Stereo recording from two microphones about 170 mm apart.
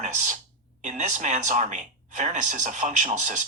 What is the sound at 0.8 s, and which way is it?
Speech, 45° right (ahead or behind).